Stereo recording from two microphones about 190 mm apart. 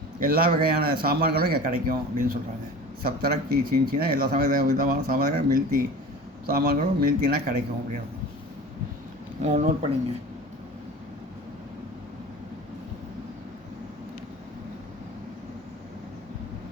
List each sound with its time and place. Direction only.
0.2 s speech: 50° right (ahead or behind)
9.4 s speech: 35° right (ahead or behind)